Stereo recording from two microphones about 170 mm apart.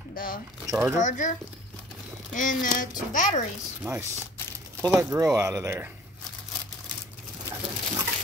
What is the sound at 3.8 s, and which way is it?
Speech, 15° right (ahead or behind).